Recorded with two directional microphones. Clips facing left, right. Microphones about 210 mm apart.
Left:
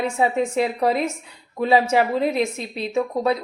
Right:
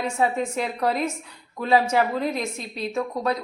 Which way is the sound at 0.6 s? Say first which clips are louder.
Left 4 dB; 25° left (ahead or behind).